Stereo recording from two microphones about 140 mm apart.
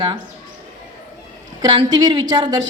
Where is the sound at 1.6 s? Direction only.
30° right (ahead or behind).